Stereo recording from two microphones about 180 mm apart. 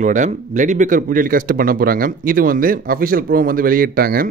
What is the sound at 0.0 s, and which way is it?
Speech, 45° right (ahead or behind).